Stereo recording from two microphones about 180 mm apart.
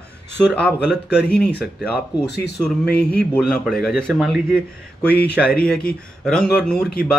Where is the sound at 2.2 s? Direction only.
70° left (ahead or behind).